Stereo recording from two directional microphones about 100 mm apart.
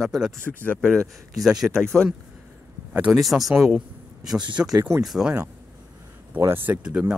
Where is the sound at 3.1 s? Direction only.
Centre (ahead or behind).